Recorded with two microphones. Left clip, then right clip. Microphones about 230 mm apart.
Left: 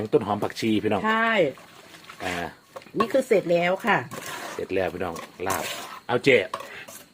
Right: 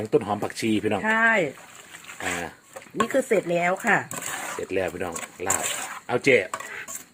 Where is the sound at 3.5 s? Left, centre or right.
Left.